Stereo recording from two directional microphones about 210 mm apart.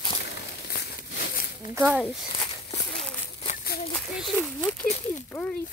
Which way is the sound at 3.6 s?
45° left (ahead or behind).